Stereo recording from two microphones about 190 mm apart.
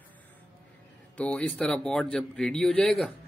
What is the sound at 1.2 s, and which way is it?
Speech, 5° left (ahead or behind).